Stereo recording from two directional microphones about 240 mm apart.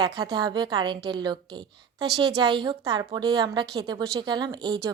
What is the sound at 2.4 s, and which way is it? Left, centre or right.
A woman's voice, centre.